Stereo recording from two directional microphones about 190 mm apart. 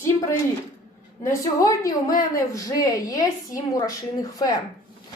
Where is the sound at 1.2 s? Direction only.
15° left (ahead or behind).